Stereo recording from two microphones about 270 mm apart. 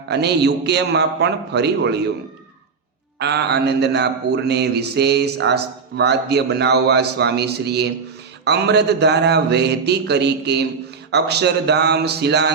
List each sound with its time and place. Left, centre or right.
0.1 s a man's voice: right
3.2 s a man's voice: right